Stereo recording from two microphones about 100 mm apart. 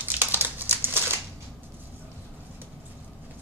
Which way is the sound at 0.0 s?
20° right (ahead or behind).